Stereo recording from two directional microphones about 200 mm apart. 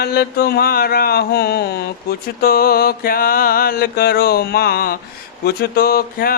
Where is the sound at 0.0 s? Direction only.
50° left (ahead or behind).